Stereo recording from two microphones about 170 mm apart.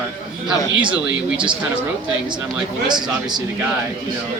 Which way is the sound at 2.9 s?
25° right (ahead or behind).